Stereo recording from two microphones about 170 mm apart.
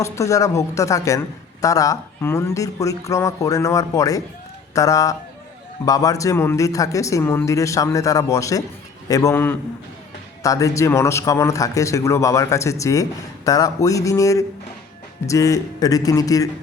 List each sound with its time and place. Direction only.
0.0 s a man's voice: 20° left (ahead or behind)